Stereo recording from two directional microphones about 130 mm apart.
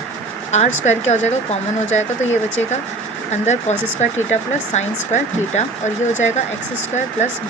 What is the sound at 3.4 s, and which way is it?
Speech, 65° left (ahead or behind).